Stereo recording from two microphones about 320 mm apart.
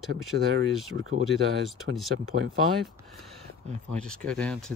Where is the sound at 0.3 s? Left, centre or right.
Right.